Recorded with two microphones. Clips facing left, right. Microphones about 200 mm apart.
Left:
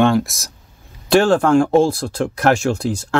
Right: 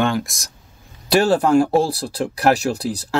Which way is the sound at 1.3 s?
5° right (ahead or behind).